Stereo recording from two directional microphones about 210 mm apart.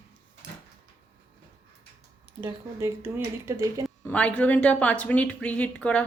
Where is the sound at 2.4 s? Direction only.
10° right (ahead or behind).